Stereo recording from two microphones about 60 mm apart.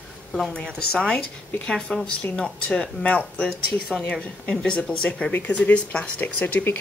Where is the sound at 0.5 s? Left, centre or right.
Centre.